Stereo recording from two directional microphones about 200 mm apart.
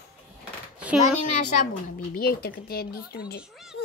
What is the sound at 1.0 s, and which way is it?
Speech, 40° left (ahead or behind).